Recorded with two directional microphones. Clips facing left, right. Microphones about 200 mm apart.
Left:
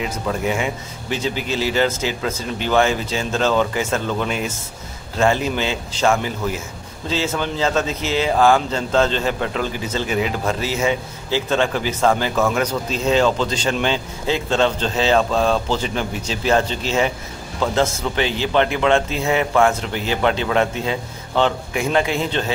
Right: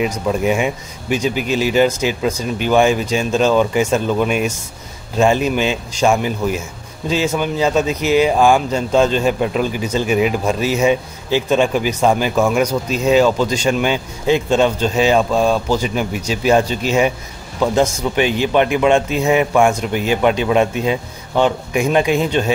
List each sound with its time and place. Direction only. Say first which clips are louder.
0.3 s speech: right 4 dB; 20° right (ahead or behind)